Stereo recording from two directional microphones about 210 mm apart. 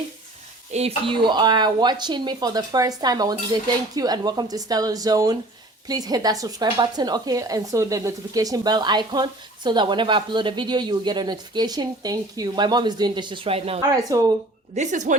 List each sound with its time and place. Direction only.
0.7 s speech: 30° right (ahead or behind)
13.9 s speech: 15° right (ahead or behind)
14.8 s speech: 35° right (ahead or behind)